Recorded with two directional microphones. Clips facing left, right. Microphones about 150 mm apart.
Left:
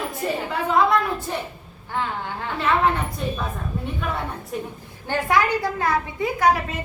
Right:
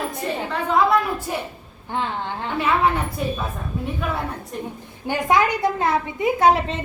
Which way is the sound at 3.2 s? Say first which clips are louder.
Right 4 dB; 5° right (ahead or behind).